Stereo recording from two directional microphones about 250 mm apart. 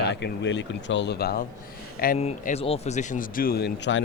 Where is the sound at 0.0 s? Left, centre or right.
Left.